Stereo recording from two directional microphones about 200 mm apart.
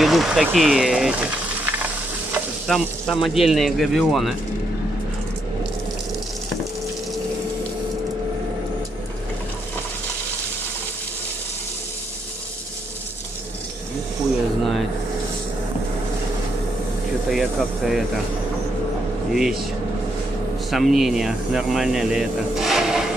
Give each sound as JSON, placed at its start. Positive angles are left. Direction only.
{"t": 0.0, "sound": "speech", "side_deg": 0}
{"t": 17.3, "sound": "speech", "side_deg": 0}
{"t": 19.3, "sound": "speech", "side_deg": 0}
{"t": 20.7, "sound": "speech", "side_deg": 0}